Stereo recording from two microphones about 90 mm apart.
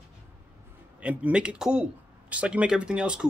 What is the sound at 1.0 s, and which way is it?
Speech, 10° right (ahead or behind).